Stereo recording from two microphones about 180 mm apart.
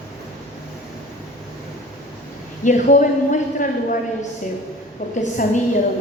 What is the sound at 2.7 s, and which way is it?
A woman's voice, 45° left (ahead or behind).